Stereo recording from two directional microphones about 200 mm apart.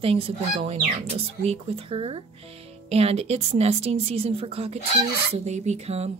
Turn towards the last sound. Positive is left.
turn(degrees=-30)  # may be behind; listen again after turning